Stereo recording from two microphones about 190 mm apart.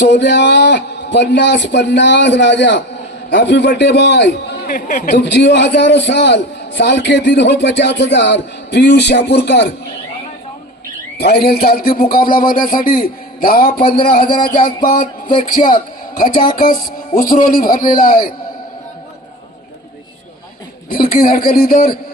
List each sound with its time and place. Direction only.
0.0 s a man's voice: 65° left (ahead or behind)
11.2 s a man's voice: 55° left (ahead or behind)
13.8 s speech: 30° left (ahead or behind)
15.6 s a man's voice: 35° left (ahead or behind)
20.9 s a man's voice: 50° left (ahead or behind)